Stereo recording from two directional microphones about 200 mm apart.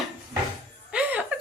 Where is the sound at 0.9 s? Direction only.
5° right (ahead or behind).